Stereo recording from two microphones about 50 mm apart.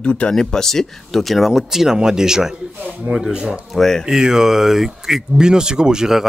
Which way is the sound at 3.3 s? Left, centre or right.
Centre.